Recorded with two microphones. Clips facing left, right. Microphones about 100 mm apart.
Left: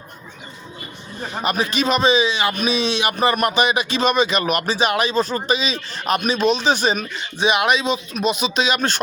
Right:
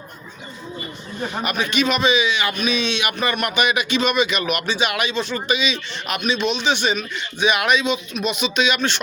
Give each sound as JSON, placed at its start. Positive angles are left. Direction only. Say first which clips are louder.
{"t": 1.3, "sound": "a man's voice", "louder": "left 3 dB", "side_deg": 30}